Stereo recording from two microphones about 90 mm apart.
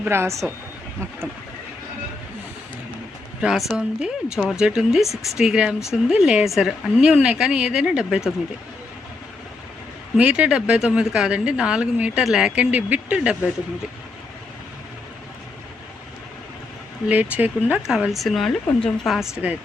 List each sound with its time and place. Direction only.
0.0 s a woman's voice: 30° right (ahead or behind)
3.4 s a woman's voice: 5° right (ahead or behind)
10.2 s a woman's voice: 10° right (ahead or behind)
12.5 s a woman's voice: 15° right (ahead or behind)
17.1 s a woman's voice: 15° right (ahead or behind)
17.8 s speech: 5° right (ahead or behind)